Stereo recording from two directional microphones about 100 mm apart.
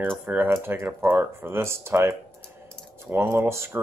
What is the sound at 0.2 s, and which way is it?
Speech, 20° right (ahead or behind).